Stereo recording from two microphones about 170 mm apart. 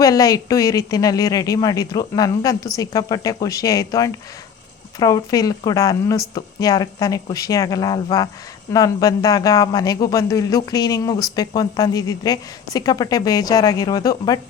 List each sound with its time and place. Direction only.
0.0 s speech: 20° left (ahead or behind)